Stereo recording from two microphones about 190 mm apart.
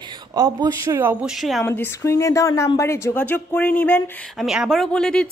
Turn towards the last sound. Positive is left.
turn(degrees=5)  # may be behind; listen again after turning